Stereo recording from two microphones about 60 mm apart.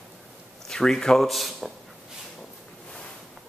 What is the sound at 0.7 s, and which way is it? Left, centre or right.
A man's voice, centre.